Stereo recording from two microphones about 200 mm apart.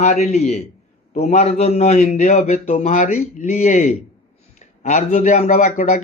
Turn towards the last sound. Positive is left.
turn(degrees=40)  # may be behind; listen again after turning